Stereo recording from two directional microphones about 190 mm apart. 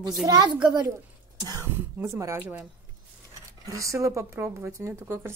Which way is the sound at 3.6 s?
15° right (ahead or behind).